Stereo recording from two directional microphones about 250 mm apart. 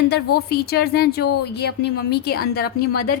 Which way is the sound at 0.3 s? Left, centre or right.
Left.